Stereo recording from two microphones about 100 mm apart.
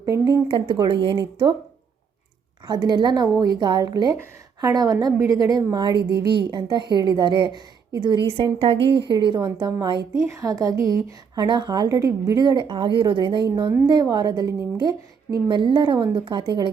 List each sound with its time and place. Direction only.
0.0 s a woman's voice: 35° right (ahead or behind)
0.4 s speech: 60° right (ahead or behind)
0.8 s a woman's voice: 45° right (ahead or behind)
2.6 s a woman's voice: 45° right (ahead or behind); by 9.1 s 70° right (ahead or behind)
9.1 s a woman's voice: 45° right (ahead or behind)
10.2 s a woman's voice: 30° right (ahead or behind)
11.3 s a woman's voice: 45° right (ahead or behind)